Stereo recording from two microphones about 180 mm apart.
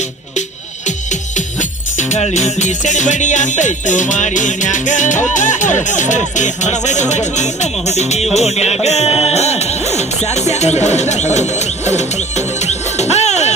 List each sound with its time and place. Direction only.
2.0 s music: 40° left (ahead or behind)
12.6 s music: 40° left (ahead or behind)